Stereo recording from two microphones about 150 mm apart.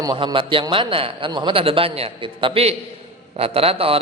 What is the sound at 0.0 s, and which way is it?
A man's voice, 25° right (ahead or behind).